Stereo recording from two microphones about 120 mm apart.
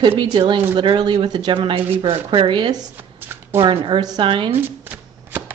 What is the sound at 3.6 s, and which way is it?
Speech, 45° right (ahead or behind).